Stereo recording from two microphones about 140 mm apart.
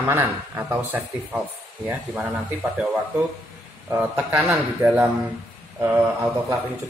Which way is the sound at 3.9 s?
15° right (ahead or behind).